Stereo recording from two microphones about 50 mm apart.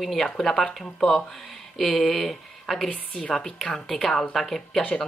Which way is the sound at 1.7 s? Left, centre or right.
Centre.